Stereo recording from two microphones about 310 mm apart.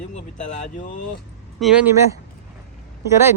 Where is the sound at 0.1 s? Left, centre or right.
Left.